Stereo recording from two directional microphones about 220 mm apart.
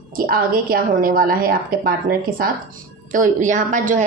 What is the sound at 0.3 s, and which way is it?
A woman's voice, 40° right (ahead or behind).